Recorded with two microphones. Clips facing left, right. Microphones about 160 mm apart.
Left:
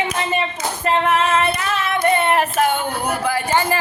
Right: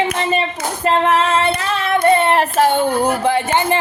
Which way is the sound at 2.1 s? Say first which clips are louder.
Right 3 dB; 30° right (ahead or behind).